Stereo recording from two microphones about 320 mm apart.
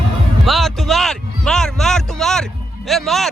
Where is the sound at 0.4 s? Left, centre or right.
Centre.